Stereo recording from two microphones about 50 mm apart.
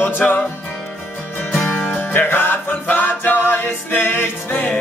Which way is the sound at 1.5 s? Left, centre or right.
Left.